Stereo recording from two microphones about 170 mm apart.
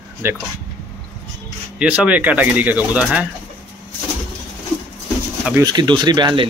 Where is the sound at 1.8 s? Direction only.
10° right (ahead or behind).